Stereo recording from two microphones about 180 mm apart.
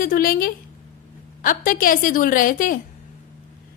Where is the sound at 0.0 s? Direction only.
55° left (ahead or behind).